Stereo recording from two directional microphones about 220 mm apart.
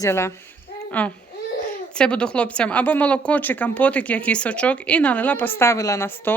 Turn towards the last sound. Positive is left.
turn(degrees=10)  # may be behind; listen again after turning